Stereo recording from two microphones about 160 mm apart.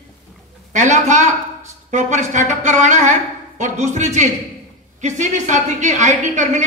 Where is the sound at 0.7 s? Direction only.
50° right (ahead or behind).